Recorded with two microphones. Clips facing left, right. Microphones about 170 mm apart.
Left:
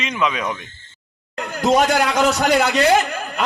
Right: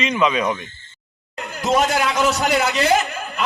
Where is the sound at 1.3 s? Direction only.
50° left (ahead or behind).